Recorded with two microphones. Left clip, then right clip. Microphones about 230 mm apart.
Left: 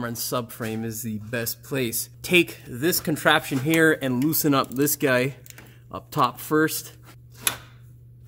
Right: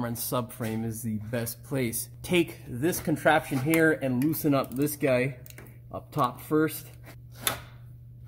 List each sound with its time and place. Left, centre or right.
0.0 s speech: left